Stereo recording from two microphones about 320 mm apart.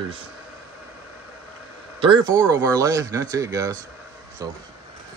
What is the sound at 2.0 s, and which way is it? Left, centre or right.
Speech, centre.